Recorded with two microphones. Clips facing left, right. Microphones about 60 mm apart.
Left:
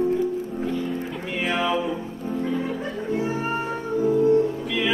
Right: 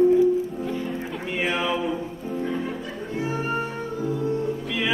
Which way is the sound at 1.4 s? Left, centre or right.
Centre.